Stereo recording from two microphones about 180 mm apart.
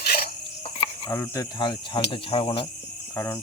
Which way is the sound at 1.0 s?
15° left (ahead or behind).